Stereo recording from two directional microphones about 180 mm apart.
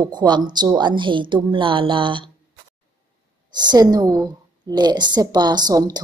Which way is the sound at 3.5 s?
25° right (ahead or behind).